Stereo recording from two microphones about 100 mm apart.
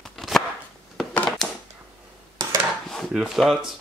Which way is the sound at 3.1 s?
5° right (ahead or behind).